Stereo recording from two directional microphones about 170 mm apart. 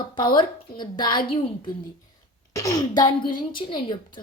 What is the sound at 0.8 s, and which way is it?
Speech, 25° left (ahead or behind).